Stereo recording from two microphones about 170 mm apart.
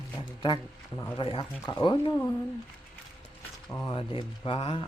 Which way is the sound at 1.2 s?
30° left (ahead or behind).